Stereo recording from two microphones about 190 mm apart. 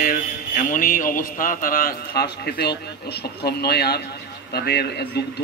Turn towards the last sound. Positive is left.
turn(degrees=60)  # may be behind; listen again after turning